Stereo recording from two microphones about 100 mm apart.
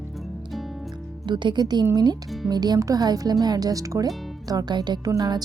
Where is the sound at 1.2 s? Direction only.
50° right (ahead or behind).